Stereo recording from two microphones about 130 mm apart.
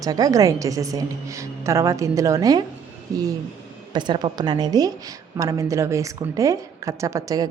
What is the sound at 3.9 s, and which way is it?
A woman's voice, 35° right (ahead or behind).